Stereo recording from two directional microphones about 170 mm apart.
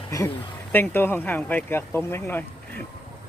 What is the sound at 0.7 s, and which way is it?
Speech, 10° left (ahead or behind).